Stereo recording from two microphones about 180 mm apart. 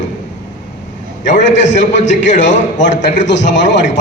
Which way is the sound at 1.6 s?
40° left (ahead or behind).